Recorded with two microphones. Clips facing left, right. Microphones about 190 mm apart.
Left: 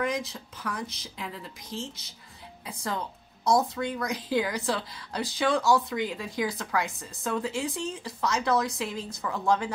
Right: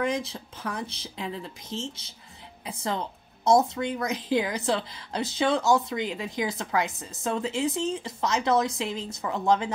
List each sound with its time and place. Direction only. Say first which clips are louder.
0.0 s speech: right 2 dB; 30° right (ahead or behind)